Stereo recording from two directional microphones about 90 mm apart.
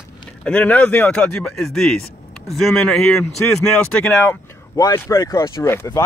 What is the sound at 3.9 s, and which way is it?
Speech, 20° left (ahead or behind).